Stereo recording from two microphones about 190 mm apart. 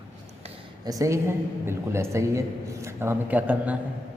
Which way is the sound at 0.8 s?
20° right (ahead or behind).